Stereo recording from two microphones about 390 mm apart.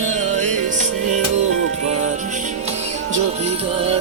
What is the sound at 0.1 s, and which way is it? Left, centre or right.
Music, centre.